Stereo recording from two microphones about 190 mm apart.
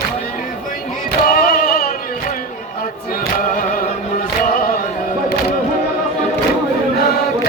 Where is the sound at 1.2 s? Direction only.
50° left (ahead or behind).